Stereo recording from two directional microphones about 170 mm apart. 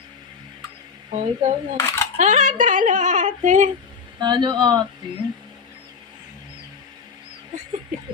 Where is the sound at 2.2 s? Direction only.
45° right (ahead or behind).